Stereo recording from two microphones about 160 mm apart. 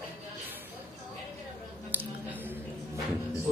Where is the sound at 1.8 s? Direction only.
10° right (ahead or behind).